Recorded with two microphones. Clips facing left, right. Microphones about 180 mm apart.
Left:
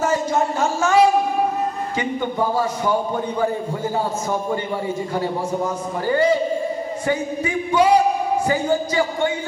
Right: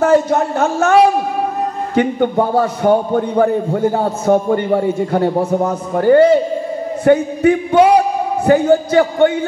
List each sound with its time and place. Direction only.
0.0 s a man's voice: 60° right (ahead or behind)